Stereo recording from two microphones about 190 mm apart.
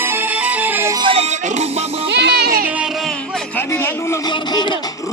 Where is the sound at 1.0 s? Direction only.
30° right (ahead or behind).